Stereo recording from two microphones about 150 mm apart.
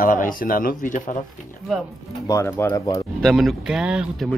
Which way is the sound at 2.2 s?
15° left (ahead or behind).